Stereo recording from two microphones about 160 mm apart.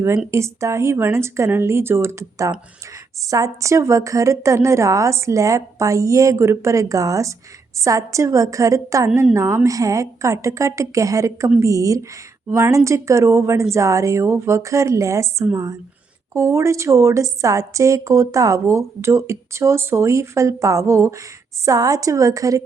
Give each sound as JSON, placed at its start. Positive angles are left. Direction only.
{"t": 0.3, "sound": "a woman's voice", "side_deg": -15}